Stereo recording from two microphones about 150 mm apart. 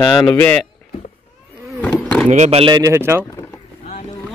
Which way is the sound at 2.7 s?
20° right (ahead or behind).